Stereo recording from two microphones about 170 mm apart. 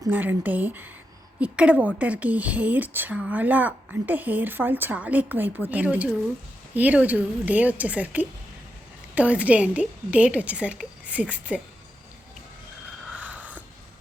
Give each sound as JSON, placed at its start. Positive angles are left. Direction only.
{"t": 0.1, "sound": "speech", "side_deg": -10}
{"t": 13.1, "sound": "snort", "side_deg": -10}